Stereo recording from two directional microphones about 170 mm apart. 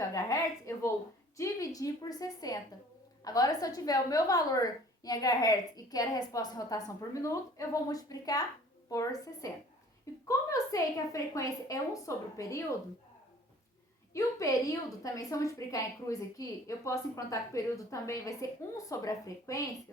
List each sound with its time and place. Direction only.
0.0 s a sound: 20° left (ahead or behind)
1.4 s a woman's voice: 20° left (ahead or behind)
14.1 s a woman's voice: 20° left (ahead or behind)